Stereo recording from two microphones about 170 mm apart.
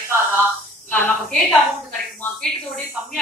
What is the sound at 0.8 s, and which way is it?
A woman's voice, 10° left (ahead or behind).